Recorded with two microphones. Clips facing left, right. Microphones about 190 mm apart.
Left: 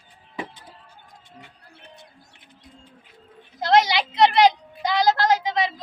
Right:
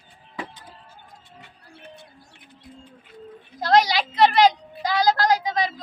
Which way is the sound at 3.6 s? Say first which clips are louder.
Even; 20° left (ahead or behind).